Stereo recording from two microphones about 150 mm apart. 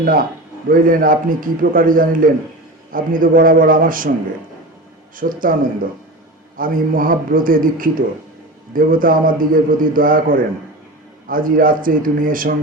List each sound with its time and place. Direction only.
0.0 s a man's voice: 70° right (ahead or behind)
5.1 s a man's voice: 65° right (ahead or behind)
6.6 s a man's voice: 65° right (ahead or behind)